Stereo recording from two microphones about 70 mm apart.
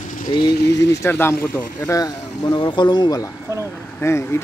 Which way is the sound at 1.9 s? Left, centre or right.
Left.